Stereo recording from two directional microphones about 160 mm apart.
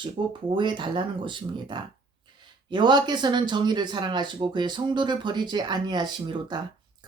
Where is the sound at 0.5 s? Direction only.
30° right (ahead or behind).